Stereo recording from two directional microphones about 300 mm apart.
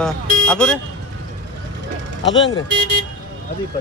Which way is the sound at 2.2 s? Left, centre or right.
Left.